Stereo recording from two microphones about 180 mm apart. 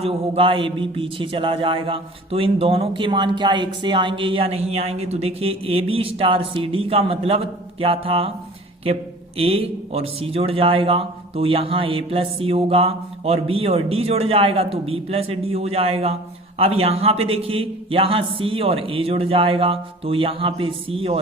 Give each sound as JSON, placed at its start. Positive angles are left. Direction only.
{"t": 0.0, "sound": "a man's voice", "side_deg": -30}
{"t": 9.4, "sound": "a man's voice", "side_deg": -35}